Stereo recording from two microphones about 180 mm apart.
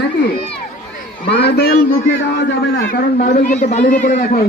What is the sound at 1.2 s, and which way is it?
A man's voice, 60° left (ahead or behind).